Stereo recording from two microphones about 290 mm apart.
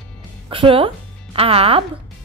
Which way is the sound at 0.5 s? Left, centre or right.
Centre.